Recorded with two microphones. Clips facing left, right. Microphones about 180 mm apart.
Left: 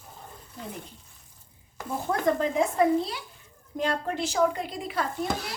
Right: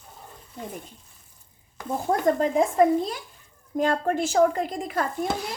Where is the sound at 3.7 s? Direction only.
45° right (ahead or behind).